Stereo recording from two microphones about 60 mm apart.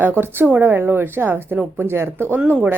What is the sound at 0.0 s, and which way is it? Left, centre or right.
A woman's voice, right.